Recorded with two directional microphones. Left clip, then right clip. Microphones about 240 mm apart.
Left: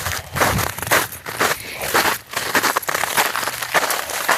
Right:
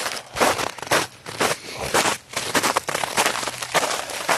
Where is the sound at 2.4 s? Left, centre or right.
Left.